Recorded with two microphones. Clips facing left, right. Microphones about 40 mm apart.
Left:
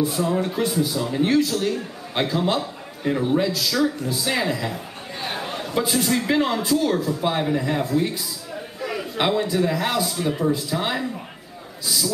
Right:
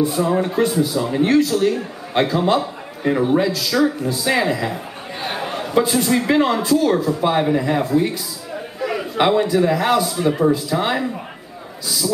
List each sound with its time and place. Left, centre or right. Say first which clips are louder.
0.2 s a man's voice: right 5 dB; centre
8.7 s chatter: right 6 dB; centre
9.6 s speech: right 5 dB; centre